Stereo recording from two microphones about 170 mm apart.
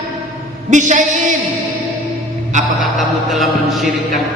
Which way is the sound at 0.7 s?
45° right (ahead or behind).